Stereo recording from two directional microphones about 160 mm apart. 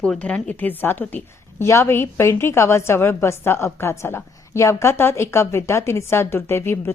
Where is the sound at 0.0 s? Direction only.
5° left (ahead or behind).